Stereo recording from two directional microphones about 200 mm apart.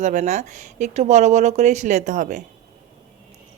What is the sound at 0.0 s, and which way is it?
Speech, 35° right (ahead or behind).